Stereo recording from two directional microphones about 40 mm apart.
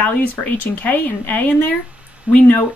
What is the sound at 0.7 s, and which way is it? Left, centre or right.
Speech, left.